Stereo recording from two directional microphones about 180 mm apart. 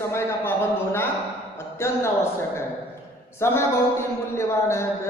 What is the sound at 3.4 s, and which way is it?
A man's voice, 15° left (ahead or behind).